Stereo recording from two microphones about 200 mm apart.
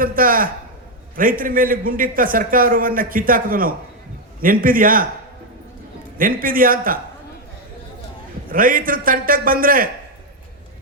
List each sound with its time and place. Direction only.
0.0 s a man's voice: 45° right (ahead or behind)
6.1 s a man's voice: 45° right (ahead or behind)
8.4 s a man's voice: 45° right (ahead or behind)